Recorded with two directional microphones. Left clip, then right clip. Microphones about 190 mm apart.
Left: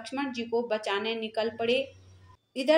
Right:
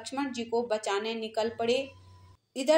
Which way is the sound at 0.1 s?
35° right (ahead or behind).